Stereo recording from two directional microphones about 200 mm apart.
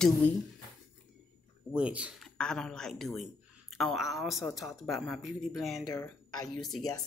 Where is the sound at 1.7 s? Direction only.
5° right (ahead or behind).